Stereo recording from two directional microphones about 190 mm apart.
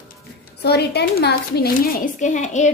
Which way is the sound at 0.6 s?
60° left (ahead or behind).